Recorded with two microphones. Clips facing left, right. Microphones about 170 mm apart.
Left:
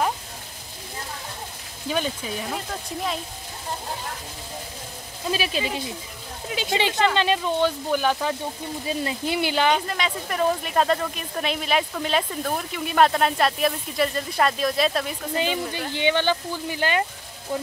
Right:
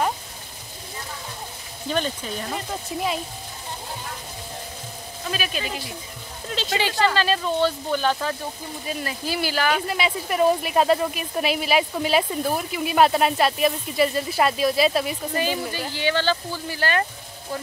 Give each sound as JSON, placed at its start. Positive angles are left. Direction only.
{"t": 1.9, "sound": "speech", "side_deg": 5}
{"t": 2.7, "sound": "speech", "side_deg": -5}
{"t": 5.3, "sound": "speech", "side_deg": 30}
{"t": 6.5, "sound": "speech", "side_deg": 15}
{"t": 8.8, "sound": "speech", "side_deg": 25}
{"t": 9.8, "sound": "speech", "side_deg": -10}
{"t": 15.3, "sound": "speech", "side_deg": 20}